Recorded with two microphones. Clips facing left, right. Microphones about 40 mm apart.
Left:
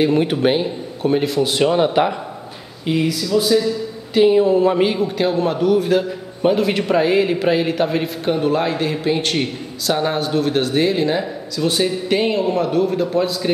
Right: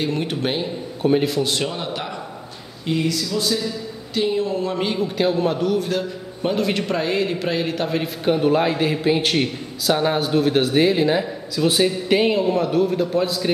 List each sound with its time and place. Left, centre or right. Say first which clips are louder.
0.0 s speech: left 7 dB; centre
1.0 s a man's voice: left 1 dB; centre
1.7 s speech: left 12 dB; left
2.9 s a man's voice: left 4 dB; centre